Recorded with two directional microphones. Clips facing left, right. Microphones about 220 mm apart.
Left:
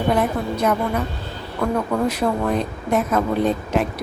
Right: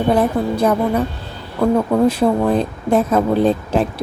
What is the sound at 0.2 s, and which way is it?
Speech, 30° right (ahead or behind).